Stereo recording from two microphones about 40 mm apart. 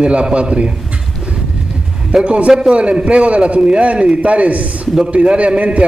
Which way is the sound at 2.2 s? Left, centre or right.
Right.